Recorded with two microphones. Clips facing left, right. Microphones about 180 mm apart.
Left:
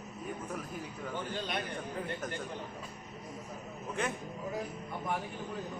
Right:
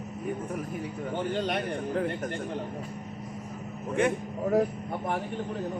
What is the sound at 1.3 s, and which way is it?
Speech, 70° right (ahead or behind).